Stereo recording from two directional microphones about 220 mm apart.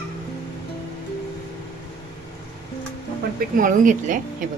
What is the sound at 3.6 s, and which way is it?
Speech, 35° right (ahead or behind).